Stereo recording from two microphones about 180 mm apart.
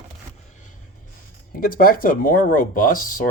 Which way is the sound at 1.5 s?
50° left (ahead or behind).